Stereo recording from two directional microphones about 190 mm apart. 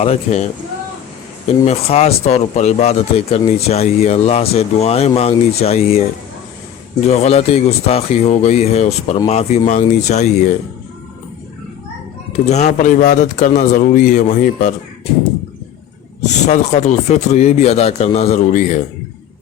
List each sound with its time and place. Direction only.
0.0 s speech: 35° left (ahead or behind)
1.6 s speech: 35° left (ahead or behind)
7.1 s speech: 35° left (ahead or behind)
12.5 s a man's voice: 40° left (ahead or behind)
16.2 s speech: 40° left (ahead or behind)